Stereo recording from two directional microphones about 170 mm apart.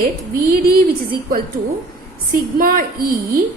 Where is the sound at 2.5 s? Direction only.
55° right (ahead or behind).